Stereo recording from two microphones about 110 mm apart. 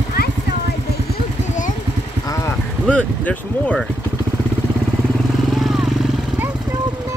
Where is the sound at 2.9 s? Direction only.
10° left (ahead or behind).